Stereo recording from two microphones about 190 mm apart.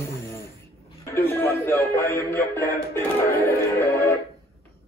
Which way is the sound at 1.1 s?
15° left (ahead or behind).